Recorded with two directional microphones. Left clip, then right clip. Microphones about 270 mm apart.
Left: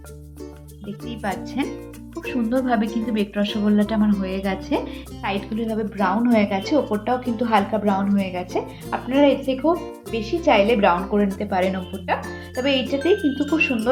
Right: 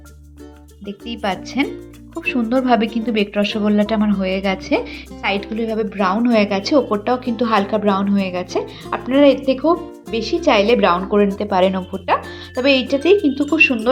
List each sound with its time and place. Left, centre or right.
1.0 s a woman's voice: right